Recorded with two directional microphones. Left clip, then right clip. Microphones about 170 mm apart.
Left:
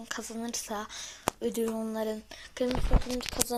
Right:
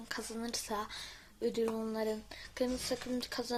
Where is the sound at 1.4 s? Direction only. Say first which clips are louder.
Right 1 dB; 15° left (ahead or behind).